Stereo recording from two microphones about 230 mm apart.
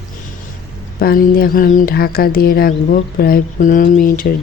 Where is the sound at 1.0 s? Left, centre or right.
Left.